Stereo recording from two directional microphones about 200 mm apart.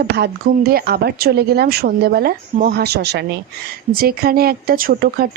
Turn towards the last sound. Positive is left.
turn(degrees=-45)  # may be behind; listen again after turning